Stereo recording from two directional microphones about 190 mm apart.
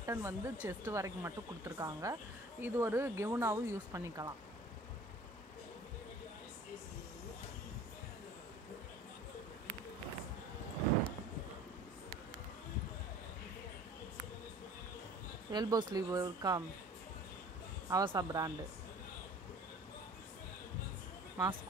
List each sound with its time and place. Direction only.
0.0 s speech: 15° right (ahead or behind)
15.5 s speech: 20° right (ahead or behind)
17.8 s speech: 20° right (ahead or behind)